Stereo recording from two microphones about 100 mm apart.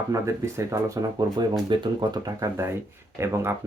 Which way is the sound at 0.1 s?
30° right (ahead or behind).